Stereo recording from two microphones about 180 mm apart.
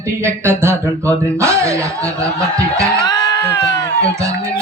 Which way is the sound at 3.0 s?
20° left (ahead or behind).